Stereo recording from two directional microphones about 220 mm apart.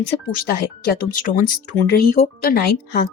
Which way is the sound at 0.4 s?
40° left (ahead or behind).